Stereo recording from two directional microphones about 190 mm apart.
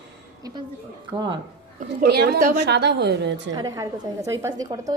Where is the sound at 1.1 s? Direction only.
25° right (ahead or behind).